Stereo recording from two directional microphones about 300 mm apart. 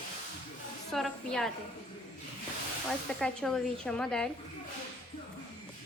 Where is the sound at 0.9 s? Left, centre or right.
Centre.